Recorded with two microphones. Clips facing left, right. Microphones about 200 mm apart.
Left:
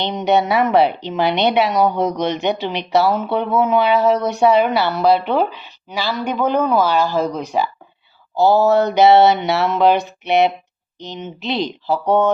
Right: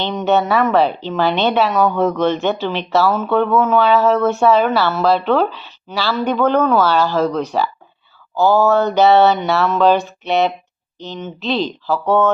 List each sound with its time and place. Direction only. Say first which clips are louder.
0.0 s a woman's voice: even; 20° left (ahead or behind)